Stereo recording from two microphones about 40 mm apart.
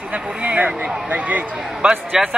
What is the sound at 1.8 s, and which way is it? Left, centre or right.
Speech, right.